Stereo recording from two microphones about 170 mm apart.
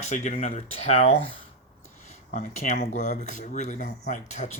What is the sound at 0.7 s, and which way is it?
Speech, 40° left (ahead or behind).